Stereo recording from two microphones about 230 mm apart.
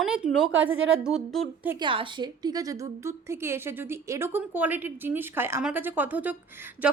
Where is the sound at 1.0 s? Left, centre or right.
Centre.